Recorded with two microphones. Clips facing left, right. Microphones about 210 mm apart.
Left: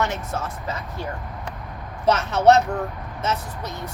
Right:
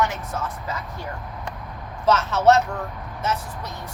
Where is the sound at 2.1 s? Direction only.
15° left (ahead or behind).